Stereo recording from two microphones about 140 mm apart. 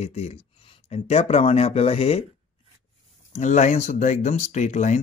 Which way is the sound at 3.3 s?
60° left (ahead or behind).